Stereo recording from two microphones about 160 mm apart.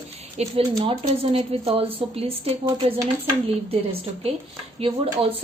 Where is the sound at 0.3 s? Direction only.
40° right (ahead or behind).